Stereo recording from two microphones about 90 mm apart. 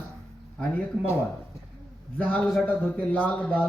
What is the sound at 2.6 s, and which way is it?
A man's voice, 15° left (ahead or behind).